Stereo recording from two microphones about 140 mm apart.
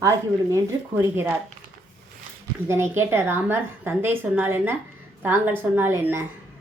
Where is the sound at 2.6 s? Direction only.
15° right (ahead or behind).